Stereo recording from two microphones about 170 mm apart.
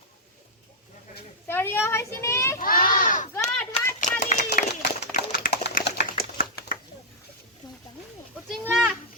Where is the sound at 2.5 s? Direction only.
55° left (ahead or behind).